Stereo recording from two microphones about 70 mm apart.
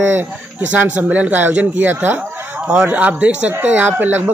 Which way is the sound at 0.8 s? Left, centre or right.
Right.